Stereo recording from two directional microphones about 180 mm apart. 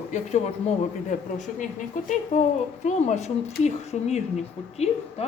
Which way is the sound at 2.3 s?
45° left (ahead or behind).